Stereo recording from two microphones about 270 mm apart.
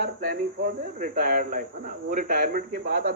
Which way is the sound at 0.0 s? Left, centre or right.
Right.